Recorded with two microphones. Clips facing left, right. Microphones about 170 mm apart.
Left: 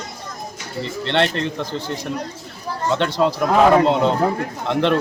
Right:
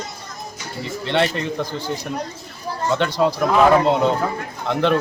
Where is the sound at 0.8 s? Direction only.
5° right (ahead or behind).